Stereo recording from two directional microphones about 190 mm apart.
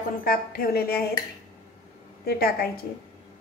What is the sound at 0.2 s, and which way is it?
Speech, 50° left (ahead or behind).